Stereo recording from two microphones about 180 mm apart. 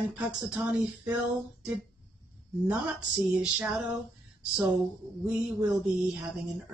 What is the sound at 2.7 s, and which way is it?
Speech, 5° right (ahead or behind).